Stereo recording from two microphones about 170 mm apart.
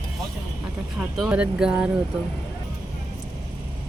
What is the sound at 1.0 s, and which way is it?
Speech, 5° right (ahead or behind).